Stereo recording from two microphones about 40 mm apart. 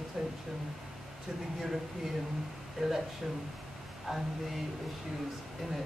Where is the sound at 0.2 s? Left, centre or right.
Centre.